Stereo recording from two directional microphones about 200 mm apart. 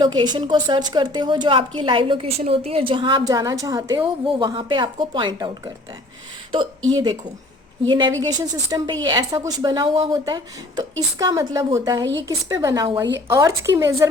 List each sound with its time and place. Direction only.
0.0 s a woman's voice: 20° right (ahead or behind)
6.9 s a woman's voice: 20° right (ahead or behind)